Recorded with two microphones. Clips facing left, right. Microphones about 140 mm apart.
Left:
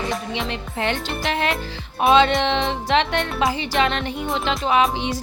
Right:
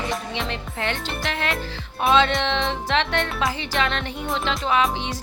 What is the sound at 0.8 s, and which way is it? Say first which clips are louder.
Music: left 4 dB; 20° left (ahead or behind).